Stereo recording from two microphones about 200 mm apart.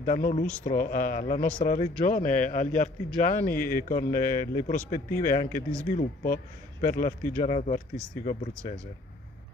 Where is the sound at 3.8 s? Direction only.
40° left (ahead or behind).